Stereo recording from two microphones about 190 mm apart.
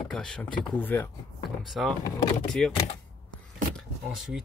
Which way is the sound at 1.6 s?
Centre (ahead or behind).